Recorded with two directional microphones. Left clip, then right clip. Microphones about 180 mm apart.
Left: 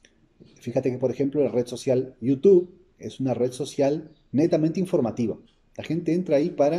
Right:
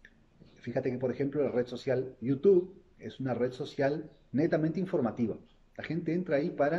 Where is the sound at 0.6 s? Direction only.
20° left (ahead or behind).